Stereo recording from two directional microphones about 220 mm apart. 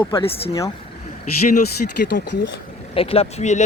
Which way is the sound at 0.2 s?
25° left (ahead or behind).